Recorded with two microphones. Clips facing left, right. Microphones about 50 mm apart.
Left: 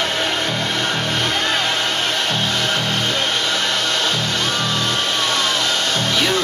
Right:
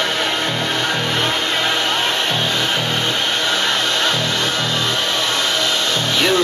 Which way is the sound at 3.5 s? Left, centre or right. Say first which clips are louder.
Right 2 dB; right.